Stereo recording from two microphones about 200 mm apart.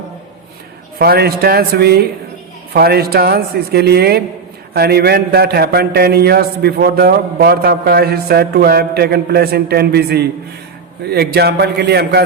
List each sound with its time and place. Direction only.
0.9 s a man's voice: 50° right (ahead or behind)